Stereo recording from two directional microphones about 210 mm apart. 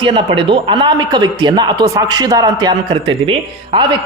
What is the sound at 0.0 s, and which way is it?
A woman's voice, 25° right (ahead or behind).